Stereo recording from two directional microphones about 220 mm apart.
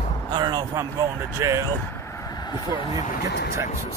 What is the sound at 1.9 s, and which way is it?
Vehicle, 10° left (ahead or behind).